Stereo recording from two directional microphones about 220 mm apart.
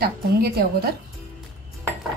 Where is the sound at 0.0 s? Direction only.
45° right (ahead or behind).